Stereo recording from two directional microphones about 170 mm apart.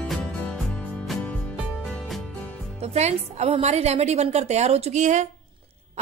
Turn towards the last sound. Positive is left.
turn(degrees=-45)  # may be behind; listen again after turning